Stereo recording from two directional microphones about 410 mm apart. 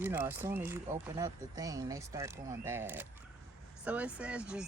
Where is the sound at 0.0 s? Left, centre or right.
Centre.